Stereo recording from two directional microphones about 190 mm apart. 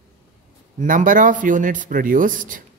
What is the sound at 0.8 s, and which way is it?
A man's voice, 45° right (ahead or behind).